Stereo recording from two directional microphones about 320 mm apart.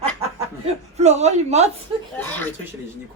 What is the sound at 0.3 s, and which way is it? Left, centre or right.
Speech, centre.